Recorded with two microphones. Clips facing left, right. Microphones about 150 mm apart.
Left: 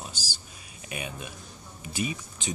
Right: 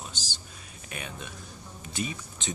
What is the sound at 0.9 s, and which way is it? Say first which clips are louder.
Speech: left 3 dB; 10° left (ahead or behind).